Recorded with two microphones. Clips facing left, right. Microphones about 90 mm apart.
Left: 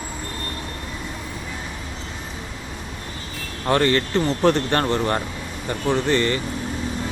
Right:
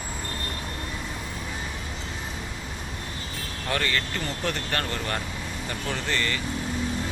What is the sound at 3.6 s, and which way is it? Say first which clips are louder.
Speech: left 9 dB; 35° left (ahead or behind).